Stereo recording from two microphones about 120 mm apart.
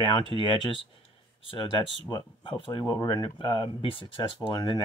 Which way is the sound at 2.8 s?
35° left (ahead or behind).